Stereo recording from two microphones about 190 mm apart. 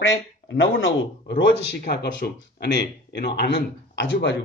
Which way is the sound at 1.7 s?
60° left (ahead or behind).